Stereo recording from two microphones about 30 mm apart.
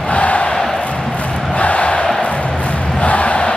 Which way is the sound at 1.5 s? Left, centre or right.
Left.